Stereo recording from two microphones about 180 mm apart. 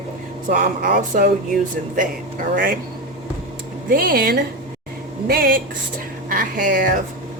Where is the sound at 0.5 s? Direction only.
50° right (ahead or behind).